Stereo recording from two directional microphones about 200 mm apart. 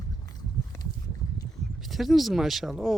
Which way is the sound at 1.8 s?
Centre (ahead or behind).